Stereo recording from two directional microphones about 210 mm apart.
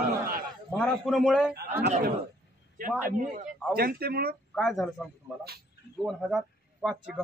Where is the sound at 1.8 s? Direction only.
35° right (ahead or behind).